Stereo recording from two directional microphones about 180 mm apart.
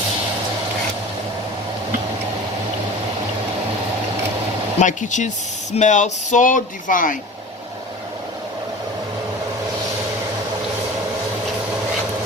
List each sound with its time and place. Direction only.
4.8 s speech: 45° left (ahead or behind)